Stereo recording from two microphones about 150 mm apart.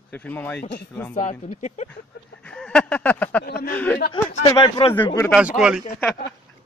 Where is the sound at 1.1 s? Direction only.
55° left (ahead or behind).